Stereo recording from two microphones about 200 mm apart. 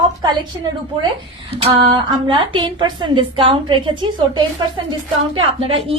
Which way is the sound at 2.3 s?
25° right (ahead or behind).